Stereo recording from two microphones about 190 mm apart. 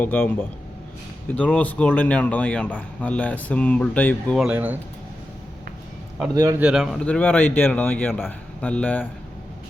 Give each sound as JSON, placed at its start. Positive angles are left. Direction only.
{"t": 0.0, "sound": "speech", "side_deg": 10}
{"t": 4.4, "sound": "speech", "side_deg": -10}
{"t": 6.3, "sound": "a man's voice", "side_deg": -20}
{"t": 6.6, "sound": "speech", "side_deg": -5}